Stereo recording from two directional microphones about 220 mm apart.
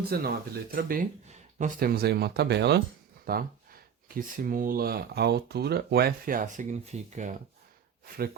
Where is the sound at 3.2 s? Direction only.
40° right (ahead or behind).